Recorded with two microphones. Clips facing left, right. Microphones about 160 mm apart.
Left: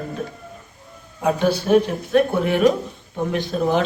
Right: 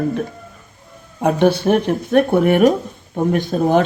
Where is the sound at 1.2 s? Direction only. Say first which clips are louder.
Right 5 dB; 60° right (ahead or behind).